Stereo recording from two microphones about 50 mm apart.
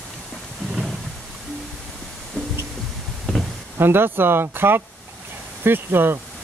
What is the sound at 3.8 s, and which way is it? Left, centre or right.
Speech, right.